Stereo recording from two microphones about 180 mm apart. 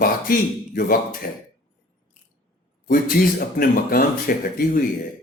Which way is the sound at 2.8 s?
50° left (ahead or behind).